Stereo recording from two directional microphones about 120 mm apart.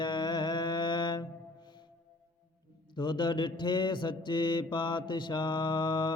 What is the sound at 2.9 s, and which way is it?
Mantra, 40° left (ahead or behind).